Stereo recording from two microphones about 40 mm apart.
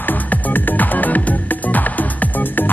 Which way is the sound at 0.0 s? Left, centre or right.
Left.